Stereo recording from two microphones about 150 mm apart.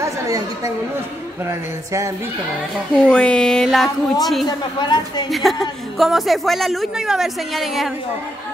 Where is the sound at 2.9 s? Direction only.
5° left (ahead or behind).